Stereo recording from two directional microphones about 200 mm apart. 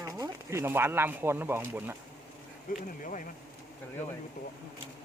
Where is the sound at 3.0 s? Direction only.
40° left (ahead or behind).